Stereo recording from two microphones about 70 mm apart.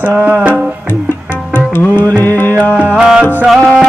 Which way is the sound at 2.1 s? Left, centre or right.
Left.